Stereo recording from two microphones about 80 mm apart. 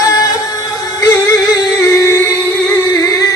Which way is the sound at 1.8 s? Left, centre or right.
Left.